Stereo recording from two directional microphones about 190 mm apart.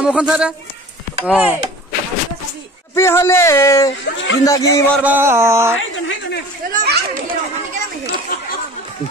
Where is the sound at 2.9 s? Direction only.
15° left (ahead or behind).